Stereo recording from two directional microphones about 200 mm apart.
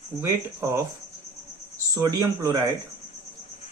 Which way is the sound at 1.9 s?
20° right (ahead or behind).